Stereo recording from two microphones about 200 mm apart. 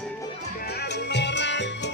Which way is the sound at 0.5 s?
55° left (ahead or behind).